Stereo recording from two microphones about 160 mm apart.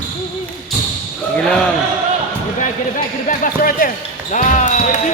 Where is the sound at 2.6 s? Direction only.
55° left (ahead or behind).